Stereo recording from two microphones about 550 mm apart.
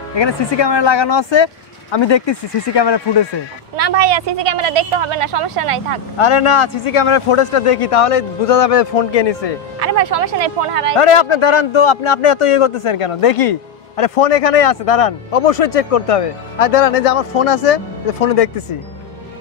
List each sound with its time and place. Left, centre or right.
0.1 s speech: left
3.7 s a woman's voice: right
6.1 s speech: left
9.8 s speech: right
11.0 s a man's voice: left